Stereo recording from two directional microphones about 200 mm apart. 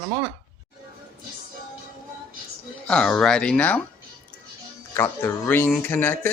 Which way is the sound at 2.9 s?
5° left (ahead or behind).